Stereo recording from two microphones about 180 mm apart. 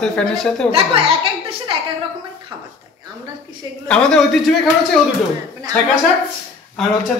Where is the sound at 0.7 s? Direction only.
30° right (ahead or behind).